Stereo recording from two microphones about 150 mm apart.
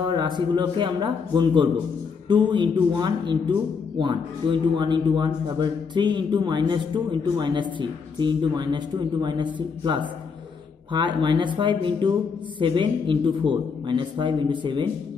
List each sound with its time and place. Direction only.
0.1 s a man's voice: 30° right (ahead or behind)